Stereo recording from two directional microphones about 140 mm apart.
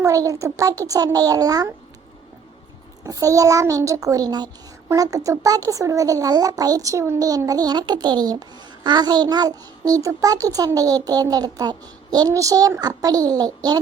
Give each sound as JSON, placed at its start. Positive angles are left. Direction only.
{"t": 0.0, "sound": "speech", "side_deg": -25}
{"t": 3.0, "sound": "speech", "side_deg": -25}